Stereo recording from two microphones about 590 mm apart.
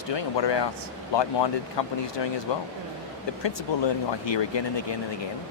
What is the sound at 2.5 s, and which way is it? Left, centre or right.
Speech, left.